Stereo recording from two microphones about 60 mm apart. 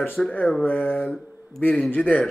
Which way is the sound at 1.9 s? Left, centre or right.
Left.